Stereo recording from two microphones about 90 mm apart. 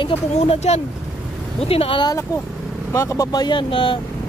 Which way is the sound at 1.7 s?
85° left.